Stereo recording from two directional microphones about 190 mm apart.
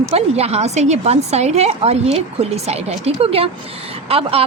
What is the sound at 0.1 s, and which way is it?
Speech, 30° right (ahead or behind).